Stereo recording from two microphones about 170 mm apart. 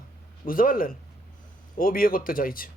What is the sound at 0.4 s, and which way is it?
Speech, 55° left (ahead or behind).